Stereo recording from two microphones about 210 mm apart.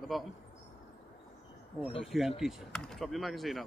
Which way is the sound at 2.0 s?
Centre (ahead or behind).